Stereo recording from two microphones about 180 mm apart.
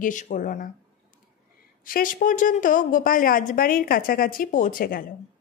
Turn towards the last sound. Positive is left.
turn(degrees=50)  # may be behind; listen again after turning